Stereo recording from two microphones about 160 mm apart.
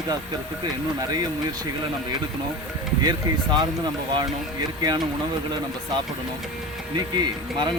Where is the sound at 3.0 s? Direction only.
25° right (ahead or behind).